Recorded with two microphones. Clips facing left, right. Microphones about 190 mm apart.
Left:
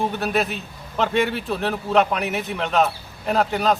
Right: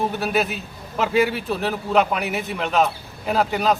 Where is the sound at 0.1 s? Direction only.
5° right (ahead or behind).